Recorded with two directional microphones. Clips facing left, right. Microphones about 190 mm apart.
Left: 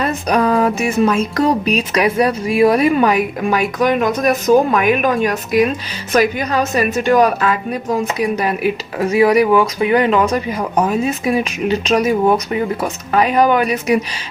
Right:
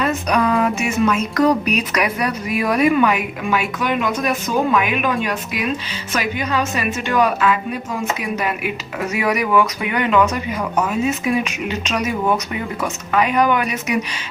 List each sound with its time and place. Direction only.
0.0 s speech: 35° left (ahead or behind)